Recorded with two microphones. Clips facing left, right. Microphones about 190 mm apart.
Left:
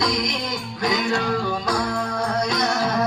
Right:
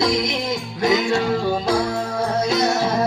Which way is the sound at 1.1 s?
25° right (ahead or behind).